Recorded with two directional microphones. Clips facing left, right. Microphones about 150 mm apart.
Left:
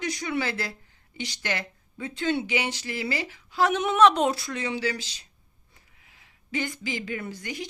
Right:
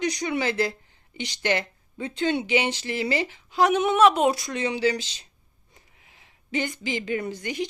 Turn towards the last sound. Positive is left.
turn(degrees=-20)  # may be behind; listen again after turning